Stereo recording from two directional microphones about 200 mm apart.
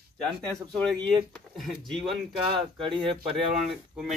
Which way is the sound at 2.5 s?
25° right (ahead or behind).